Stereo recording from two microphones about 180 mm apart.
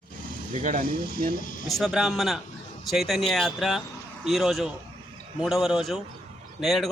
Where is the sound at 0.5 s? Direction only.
45° right (ahead or behind).